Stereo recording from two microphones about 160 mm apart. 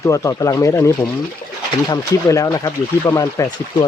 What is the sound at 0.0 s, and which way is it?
Speech, 20° left (ahead or behind).